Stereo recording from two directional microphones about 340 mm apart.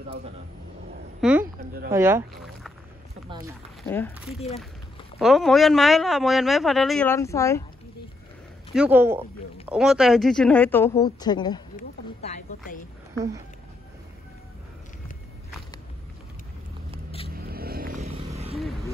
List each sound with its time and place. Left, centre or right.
1.2 s a sound: centre
1.9 s speech: centre
3.3 s speech: centre
3.8 s a man's voice: centre
5.2 s a man's voice: centre
8.7 s a man's voice: centre
11.7 s a sound: left
17.4 s vehicle: right